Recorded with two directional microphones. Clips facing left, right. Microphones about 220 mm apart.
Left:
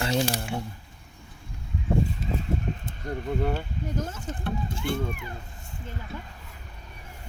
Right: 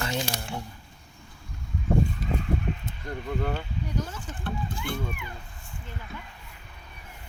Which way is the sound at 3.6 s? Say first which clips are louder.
Left 1 dB; 45° left (ahead or behind).